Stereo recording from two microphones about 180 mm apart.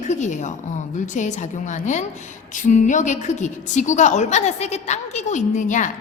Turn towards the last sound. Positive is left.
turn(degrees=45)  # may be behind; listen again after turning